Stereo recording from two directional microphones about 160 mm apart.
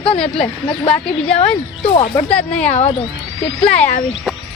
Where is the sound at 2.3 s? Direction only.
10° left (ahead or behind).